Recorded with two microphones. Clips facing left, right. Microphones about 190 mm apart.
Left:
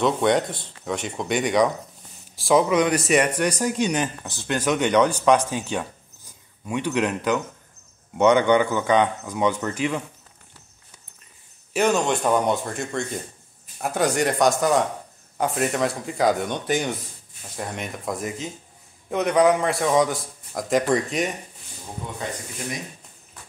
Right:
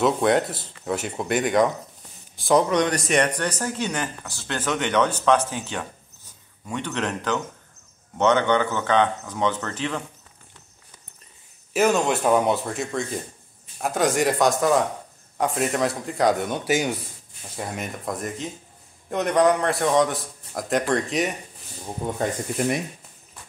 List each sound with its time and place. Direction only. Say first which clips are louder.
0.0 s a man's voice: even; centre (ahead or behind)
11.7 s a man's voice: right 1 dB; centre (ahead or behind)
22.0 s speech: right 7 dB; 50° right (ahead or behind)